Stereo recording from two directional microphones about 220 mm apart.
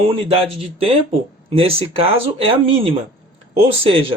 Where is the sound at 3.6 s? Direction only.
25° right (ahead or behind).